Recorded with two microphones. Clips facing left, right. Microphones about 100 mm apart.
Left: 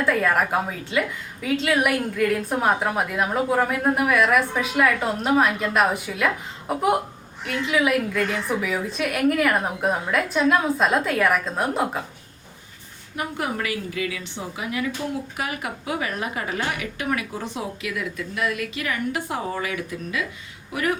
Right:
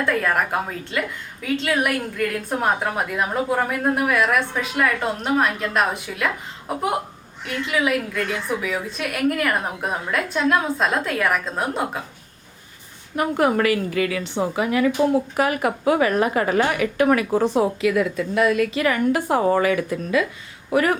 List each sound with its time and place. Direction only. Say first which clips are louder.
0.0 s a woman's voice: even; 5° left (ahead or behind)
13.1 s a woman's voice: right 8 dB; 55° right (ahead or behind)
17.5 s a woman's voice: right 11 dB; 40° right (ahead or behind)
20.7 s a woman's voice: right 6 dB; 60° right (ahead or behind)